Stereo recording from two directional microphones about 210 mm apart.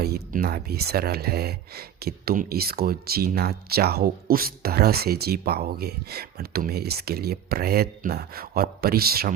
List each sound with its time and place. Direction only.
0.0 s speech: 50° right (ahead or behind)